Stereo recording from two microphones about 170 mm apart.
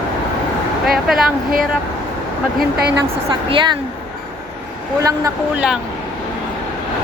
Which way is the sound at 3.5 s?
30° right (ahead or behind).